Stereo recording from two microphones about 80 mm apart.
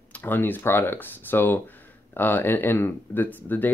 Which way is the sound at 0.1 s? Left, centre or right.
Left.